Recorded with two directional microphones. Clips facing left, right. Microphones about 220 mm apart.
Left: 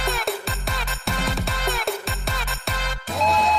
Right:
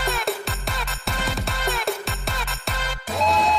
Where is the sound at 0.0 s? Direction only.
Centre (ahead or behind).